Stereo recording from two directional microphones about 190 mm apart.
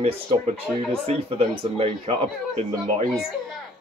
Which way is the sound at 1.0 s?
30° right (ahead or behind).